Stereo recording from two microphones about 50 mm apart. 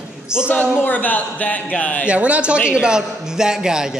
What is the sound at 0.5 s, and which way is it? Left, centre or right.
A man's voice, left.